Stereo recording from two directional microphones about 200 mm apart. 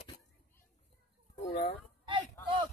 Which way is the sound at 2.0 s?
25° right (ahead or behind).